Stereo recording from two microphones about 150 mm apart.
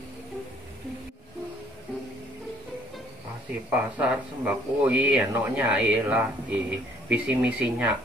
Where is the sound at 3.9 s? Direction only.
10° right (ahead or behind).